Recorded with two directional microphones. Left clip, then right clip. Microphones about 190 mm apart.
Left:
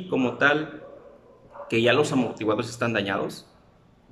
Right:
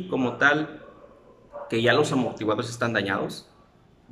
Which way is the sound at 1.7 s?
Centre (ahead or behind).